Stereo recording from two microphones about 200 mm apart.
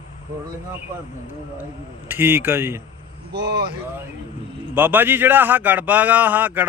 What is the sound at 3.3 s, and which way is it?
Speech, 55° right (ahead or behind).